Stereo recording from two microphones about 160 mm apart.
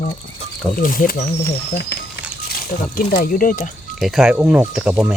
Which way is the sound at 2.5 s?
65° left (ahead or behind).